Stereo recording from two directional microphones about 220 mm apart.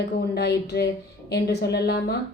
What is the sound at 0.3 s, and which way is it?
A woman's voice, 45° left (ahead or behind).